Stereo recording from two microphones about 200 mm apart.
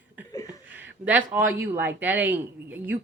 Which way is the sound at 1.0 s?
10° right (ahead or behind).